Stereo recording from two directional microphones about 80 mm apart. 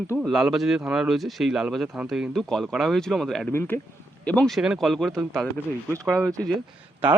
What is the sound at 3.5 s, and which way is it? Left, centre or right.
Speech, left.